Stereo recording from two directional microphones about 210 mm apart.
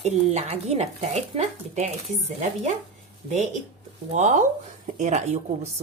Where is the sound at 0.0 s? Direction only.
30° right (ahead or behind).